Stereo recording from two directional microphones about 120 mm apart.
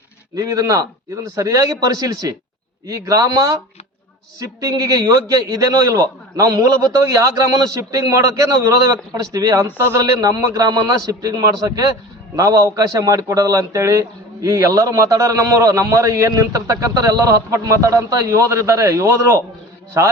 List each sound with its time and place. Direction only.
0.3 s a man's voice: 30° right (ahead or behind)